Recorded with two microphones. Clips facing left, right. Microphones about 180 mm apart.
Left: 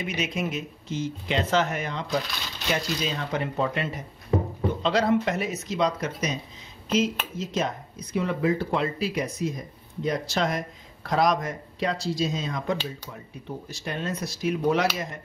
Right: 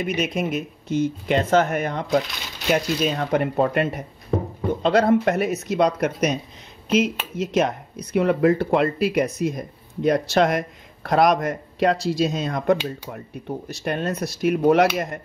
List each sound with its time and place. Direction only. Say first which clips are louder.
0.0 s speech: right 5 dB; 60° right (ahead or behind)